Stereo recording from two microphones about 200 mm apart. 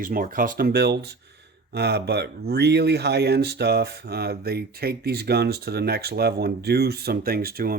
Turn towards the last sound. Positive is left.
turn(degrees=-50)  # may be behind; listen again after turning